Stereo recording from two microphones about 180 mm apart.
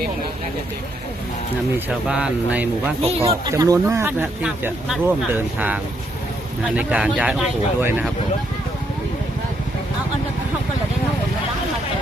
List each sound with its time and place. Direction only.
1.9 s speech: 5° right (ahead or behind)
3.0 s speech: 35° right (ahead or behind)
3.5 s speech: 15° right (ahead or behind)